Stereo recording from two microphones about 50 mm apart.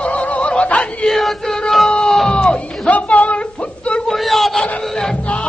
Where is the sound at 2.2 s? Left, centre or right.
Centre.